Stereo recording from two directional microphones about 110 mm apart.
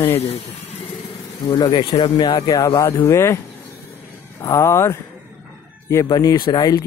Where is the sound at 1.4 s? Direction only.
40° left (ahead or behind).